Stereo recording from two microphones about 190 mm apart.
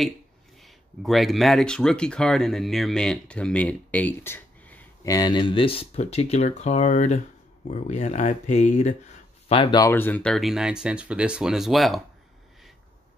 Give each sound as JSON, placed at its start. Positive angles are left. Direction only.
{"t": 0.6, "sound": "speech", "side_deg": 0}